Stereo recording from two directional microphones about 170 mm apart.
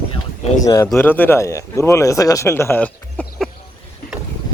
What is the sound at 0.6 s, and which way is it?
Speech, 20° left (ahead or behind).